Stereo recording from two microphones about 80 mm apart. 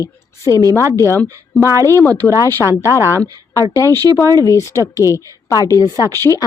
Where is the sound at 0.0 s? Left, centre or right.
Left.